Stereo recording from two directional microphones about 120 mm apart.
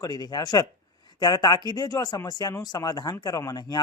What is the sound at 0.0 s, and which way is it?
Speech, 35° left (ahead or behind).